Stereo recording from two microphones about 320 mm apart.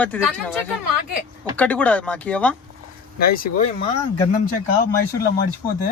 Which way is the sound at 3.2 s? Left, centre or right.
Left.